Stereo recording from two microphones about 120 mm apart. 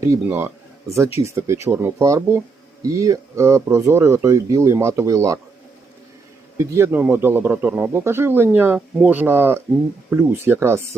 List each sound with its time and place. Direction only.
0.0 s speech: 20° right (ahead or behind)
6.6 s speech: 20° right (ahead or behind)